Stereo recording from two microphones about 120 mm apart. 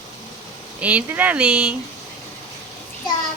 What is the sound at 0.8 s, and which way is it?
Speech, 10° right (ahead or behind).